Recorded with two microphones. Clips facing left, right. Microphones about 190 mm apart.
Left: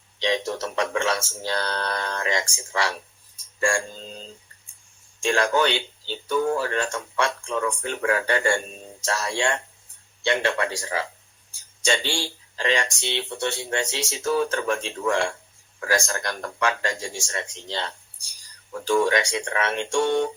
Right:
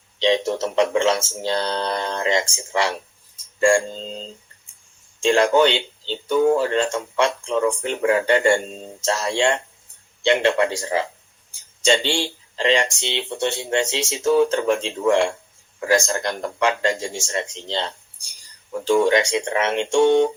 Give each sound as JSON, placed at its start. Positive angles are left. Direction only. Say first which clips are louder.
{"t": 0.2, "sound": "speech", "louder": "right 6 dB", "side_deg": -25}